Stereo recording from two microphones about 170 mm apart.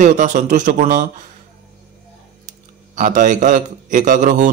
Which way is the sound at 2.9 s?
50° right (ahead or behind).